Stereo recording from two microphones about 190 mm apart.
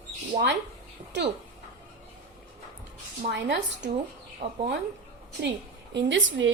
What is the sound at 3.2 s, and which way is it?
Speech, 65° right (ahead or behind).